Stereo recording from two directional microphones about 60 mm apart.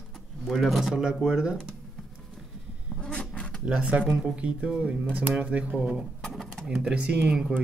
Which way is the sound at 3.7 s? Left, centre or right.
Right.